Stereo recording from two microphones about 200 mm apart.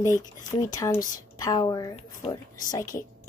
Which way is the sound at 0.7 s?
15° left (ahead or behind).